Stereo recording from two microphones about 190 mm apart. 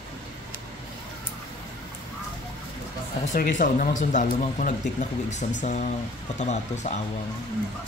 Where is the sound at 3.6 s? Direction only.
45° left (ahead or behind).